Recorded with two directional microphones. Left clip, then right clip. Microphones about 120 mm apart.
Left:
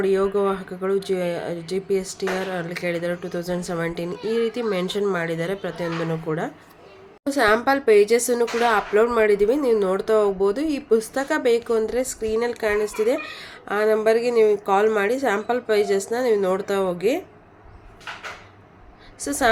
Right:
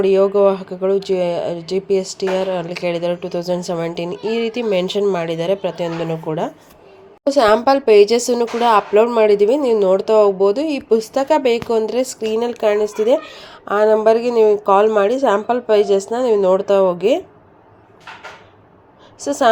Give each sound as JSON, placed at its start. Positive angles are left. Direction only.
{"t": 0.0, "sound": "speech", "side_deg": -10}
{"t": 19.2, "sound": "a woman's voice", "side_deg": -10}